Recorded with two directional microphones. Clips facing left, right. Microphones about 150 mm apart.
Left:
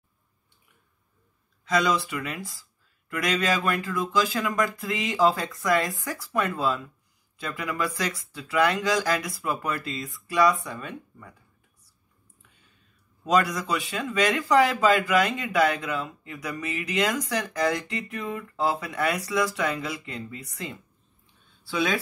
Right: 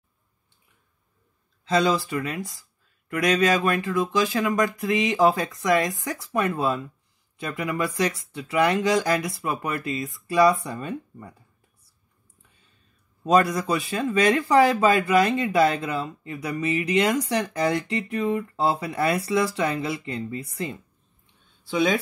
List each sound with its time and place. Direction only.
2.3 s speech: 20° right (ahead or behind)
13.2 s speech: 25° right (ahead or behind)